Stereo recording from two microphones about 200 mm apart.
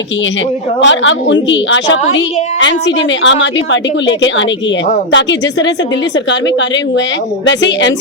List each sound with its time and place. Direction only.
0.8 s a woman's voice: 65° left (ahead or behind)
7.4 s speech: 65° left (ahead or behind)